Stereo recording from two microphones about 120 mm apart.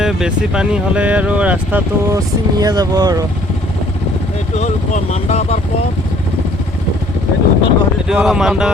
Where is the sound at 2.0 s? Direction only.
30° right (ahead or behind).